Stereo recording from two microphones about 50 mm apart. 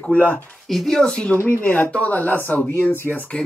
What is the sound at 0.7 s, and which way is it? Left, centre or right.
Speech, centre.